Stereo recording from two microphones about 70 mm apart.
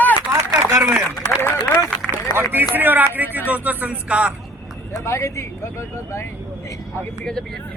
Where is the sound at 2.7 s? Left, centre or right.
Right.